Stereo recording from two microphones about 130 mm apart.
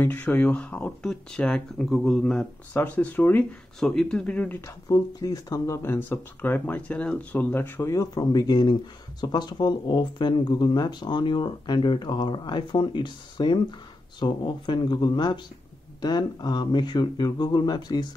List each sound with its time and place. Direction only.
0.0 s speech: 15° left (ahead or behind); by 18.0 s 35° left (ahead or behind)